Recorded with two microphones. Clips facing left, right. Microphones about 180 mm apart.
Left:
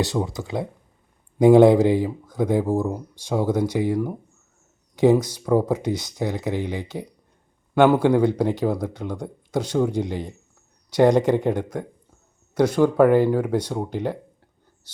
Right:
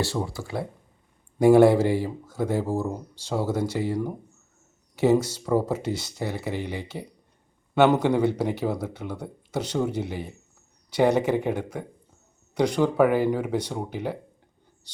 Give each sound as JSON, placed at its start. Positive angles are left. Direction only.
{"t": 0.0, "sound": "speech", "side_deg": 15}
{"t": 4.9, "sound": "speech", "side_deg": 10}
{"t": 8.4, "sound": "speech", "side_deg": -10}
{"t": 9.5, "sound": "speech", "side_deg": 10}
{"t": 10.0, "sound": "speech", "side_deg": -10}